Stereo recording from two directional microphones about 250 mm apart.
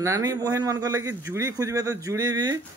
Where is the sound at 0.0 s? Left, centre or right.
Centre.